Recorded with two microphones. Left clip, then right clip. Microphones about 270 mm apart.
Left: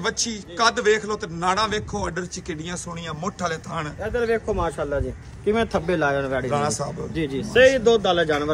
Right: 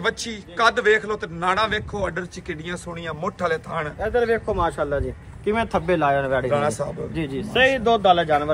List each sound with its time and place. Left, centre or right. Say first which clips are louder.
0.0 s a man's voice: right 1 dB; centre
4.0 s a man's voice: right 2 dB; centre